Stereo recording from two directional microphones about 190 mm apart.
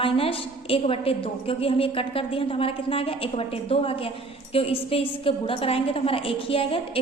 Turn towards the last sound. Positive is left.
turn(degrees=30)  # may be behind; listen again after turning